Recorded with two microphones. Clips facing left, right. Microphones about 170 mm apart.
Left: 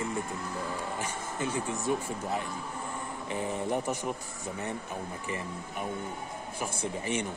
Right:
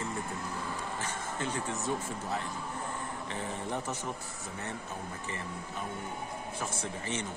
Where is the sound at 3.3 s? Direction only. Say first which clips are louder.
Left 7 dB; 15° left (ahead or behind).